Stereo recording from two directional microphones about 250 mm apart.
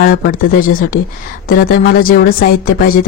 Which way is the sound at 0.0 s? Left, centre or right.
Left.